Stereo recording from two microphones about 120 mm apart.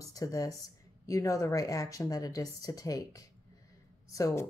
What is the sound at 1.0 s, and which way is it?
A woman's voice, 30° left (ahead or behind).